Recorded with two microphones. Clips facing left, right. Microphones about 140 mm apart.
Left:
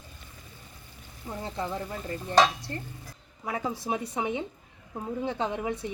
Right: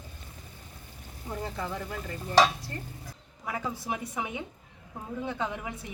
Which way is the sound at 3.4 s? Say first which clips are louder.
Left 3 dB; 25° left (ahead or behind).